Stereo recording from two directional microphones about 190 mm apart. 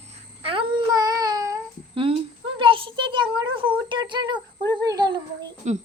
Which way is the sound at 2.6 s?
25° right (ahead or behind).